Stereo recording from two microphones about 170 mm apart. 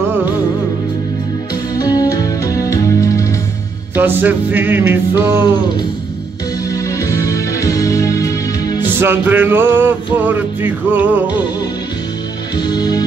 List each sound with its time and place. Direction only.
1.8 s music: 20° left (ahead or behind)
3.9 s music: 10° right (ahead or behind)
6.7 s music: 20° left (ahead or behind)
9.0 s music: 10° right (ahead or behind)
12.5 s music: 25° left (ahead or behind)